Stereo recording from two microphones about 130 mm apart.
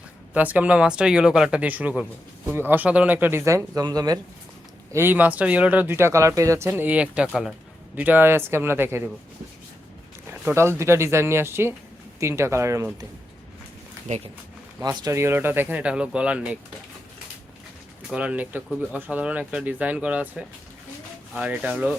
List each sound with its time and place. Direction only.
0.3 s speech: 10° right (ahead or behind); by 4.2 s 30° right (ahead or behind)
4.9 s speech: 15° right (ahead or behind)
10.5 s speech: 20° right (ahead or behind)
14.1 s speech: 75° right (ahead or behind)
14.8 s speech: 30° right (ahead or behind); by 16.6 s 10° right (ahead or behind)
18.1 s speech: 10° right (ahead or behind)
21.3 s speech: 10° right (ahead or behind)